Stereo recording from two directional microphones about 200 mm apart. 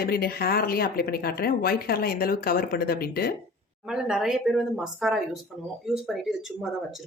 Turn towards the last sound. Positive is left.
turn(degrees=0)  # may be behind; listen again after turning